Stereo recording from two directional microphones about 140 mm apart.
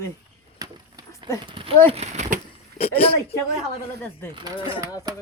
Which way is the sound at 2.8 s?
45° left (ahead or behind).